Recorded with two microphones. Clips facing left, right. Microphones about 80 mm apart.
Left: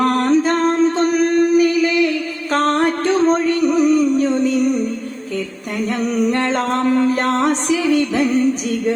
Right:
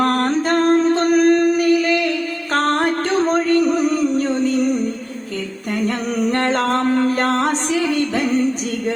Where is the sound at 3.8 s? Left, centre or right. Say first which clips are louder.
Left 4 dB; right.